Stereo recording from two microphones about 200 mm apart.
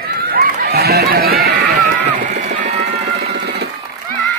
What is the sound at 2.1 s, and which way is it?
Music, 35° right (ahead or behind).